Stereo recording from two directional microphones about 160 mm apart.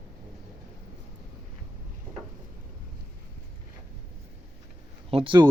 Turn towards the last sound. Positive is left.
turn(degrees=-30)  # may be behind; listen again after turning